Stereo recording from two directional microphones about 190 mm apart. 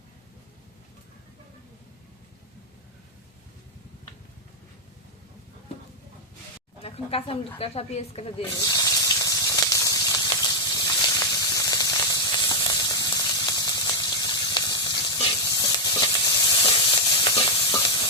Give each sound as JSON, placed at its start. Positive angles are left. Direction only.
{"t": 6.8, "sound": "speech", "side_deg": 30}
{"t": 8.5, "sound": "snake", "side_deg": 20}